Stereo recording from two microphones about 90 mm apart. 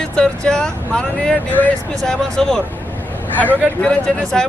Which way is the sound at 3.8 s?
10° left (ahead or behind).